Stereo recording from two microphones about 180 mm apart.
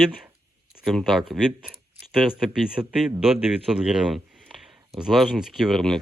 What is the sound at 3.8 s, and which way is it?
Speech, 5° right (ahead or behind).